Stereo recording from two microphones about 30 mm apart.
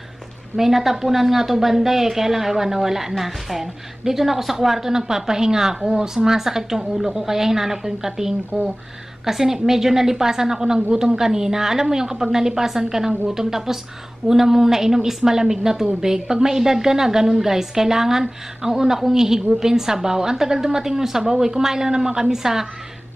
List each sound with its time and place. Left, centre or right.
0.6 s a woman's voice: centre